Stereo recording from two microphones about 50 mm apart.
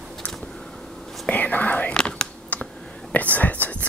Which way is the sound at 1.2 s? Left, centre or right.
Left.